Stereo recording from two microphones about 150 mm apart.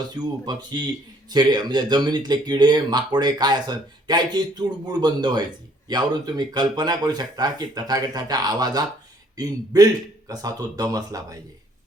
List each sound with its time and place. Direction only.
0.1 s speech: 30° right (ahead or behind)